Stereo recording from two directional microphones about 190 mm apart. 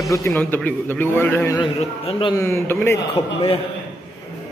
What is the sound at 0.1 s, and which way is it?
A man's voice, 15° left (ahead or behind).